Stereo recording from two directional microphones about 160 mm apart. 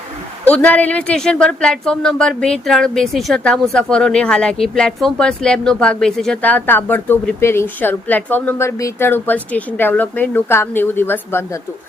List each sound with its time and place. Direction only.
0.4 s speech: 10° left (ahead or behind)